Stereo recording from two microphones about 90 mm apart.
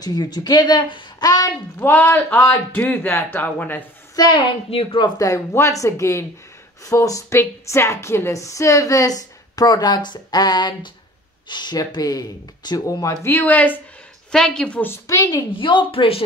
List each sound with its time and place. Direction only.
0.0 s speech: 45° left (ahead or behind)
1.2 s speech: 45° left (ahead or behind)
1.8 s speech: 20° left (ahead or behind)
4.3 s speech: 80° left
5.1 s a woman's voice: 40° left (ahead or behind)
13.3 s speech: 20° left (ahead or behind)
14.3 s a woman's voice: 5° left (ahead or behind)
15.0 s a woman's voice: 35° left (ahead or behind)
15.6 s speech: 70° left (ahead or behind); by 16.3 s 90° left